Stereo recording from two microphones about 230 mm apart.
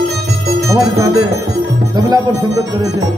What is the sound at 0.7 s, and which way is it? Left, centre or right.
Music, centre.